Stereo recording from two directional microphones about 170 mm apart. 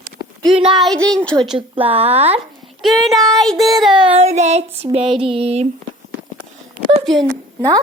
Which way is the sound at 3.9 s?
35° right (ahead or behind).